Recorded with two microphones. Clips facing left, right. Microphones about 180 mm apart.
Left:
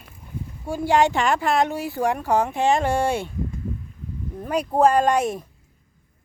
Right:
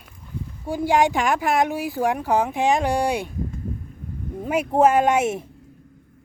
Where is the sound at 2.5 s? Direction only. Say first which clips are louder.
Even; 15° right (ahead or behind).